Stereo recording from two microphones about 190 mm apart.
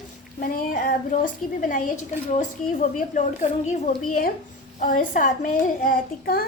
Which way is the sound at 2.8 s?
40° left (ahead or behind).